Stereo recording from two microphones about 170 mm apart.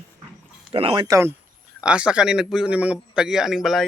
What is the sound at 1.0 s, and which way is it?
Speech, 15° right (ahead or behind).